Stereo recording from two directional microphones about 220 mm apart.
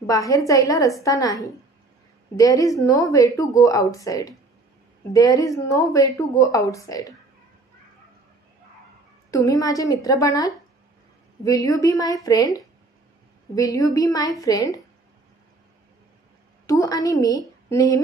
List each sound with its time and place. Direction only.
0.0 s a woman's voice: 15° left (ahead or behind)
9.3 s a woman's voice: 15° left (ahead or behind)
16.6 s a woman's voice: 15° left (ahead or behind)